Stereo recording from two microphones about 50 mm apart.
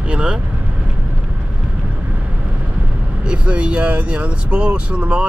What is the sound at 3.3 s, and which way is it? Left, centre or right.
Speech, right.